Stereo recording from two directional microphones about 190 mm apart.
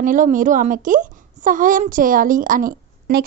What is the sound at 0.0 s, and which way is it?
A woman's voice, 45° right (ahead or behind).